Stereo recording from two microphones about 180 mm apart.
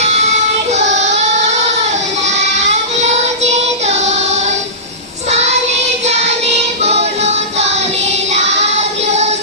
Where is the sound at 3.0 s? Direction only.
40° right (ahead or behind).